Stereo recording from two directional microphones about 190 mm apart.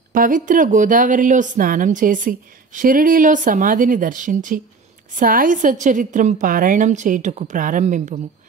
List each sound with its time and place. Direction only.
0.1 s speech: 45° right (ahead or behind)